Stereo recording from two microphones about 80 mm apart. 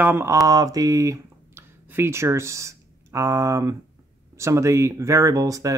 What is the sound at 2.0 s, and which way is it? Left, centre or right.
Speech, right.